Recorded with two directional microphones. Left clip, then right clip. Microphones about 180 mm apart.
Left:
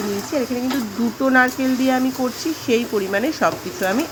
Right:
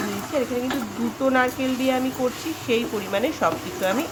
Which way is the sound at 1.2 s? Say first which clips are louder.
Left 4 dB; 20° left (ahead or behind).